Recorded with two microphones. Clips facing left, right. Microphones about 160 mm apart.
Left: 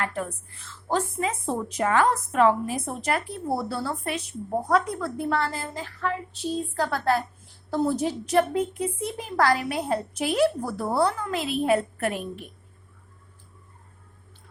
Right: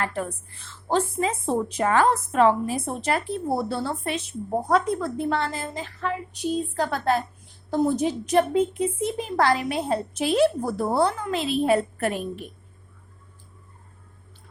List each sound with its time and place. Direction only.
0.0 s a woman's voice: 30° right (ahead or behind)